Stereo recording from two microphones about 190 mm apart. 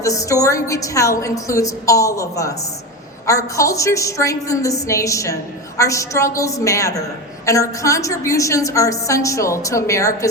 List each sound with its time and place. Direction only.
0.0 s a woman's voice: 15° left (ahead or behind)